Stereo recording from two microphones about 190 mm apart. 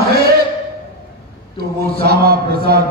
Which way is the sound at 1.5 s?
55° right (ahead or behind).